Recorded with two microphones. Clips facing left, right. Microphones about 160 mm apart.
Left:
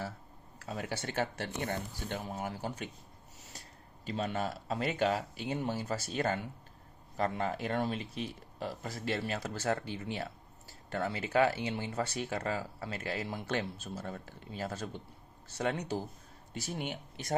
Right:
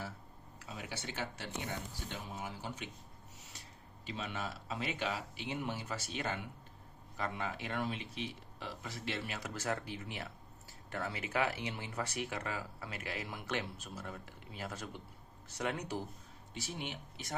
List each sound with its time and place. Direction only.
0.6 s speech: 45° left (ahead or behind)
4.0 s speech: 40° left (ahead or behind)
16.6 s speech: 45° left (ahead or behind)